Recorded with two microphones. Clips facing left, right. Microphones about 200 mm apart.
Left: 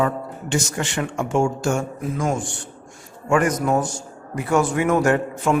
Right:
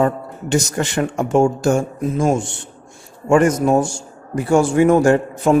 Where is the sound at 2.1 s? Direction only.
25° right (ahead or behind).